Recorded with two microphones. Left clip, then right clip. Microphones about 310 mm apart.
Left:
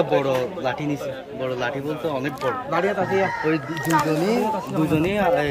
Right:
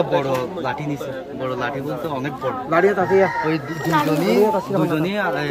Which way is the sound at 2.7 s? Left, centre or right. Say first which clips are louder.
Right 7 dB; centre.